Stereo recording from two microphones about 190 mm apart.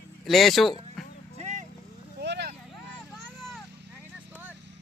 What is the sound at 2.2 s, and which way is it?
Vehicle, 60° right (ahead or behind).